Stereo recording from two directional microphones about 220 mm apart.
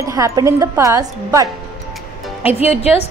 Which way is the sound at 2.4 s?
30° left (ahead or behind).